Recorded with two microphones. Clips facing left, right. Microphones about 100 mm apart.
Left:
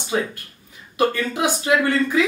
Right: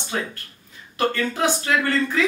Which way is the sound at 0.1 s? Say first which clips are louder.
Left 5 dB; 15° left (ahead or behind).